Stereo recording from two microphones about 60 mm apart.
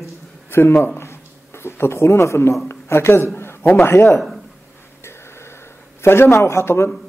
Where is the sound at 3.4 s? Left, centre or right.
Left.